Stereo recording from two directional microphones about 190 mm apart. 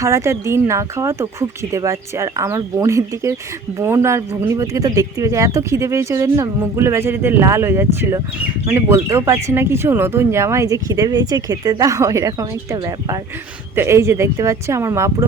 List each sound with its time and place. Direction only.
0.0 s speech: 15° right (ahead or behind)